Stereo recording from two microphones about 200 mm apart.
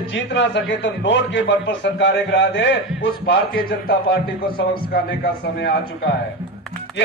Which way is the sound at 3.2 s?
50° left (ahead or behind).